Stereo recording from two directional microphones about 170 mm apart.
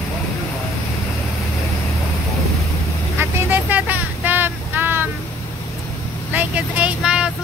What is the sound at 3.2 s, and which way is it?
Vehicle, 10° right (ahead or behind).